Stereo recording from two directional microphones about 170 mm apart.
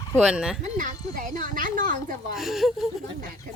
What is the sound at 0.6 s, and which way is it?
Speech, 50° right (ahead or behind).